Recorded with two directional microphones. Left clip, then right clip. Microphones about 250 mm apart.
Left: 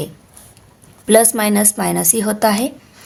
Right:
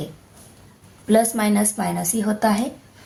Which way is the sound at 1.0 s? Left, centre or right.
Left.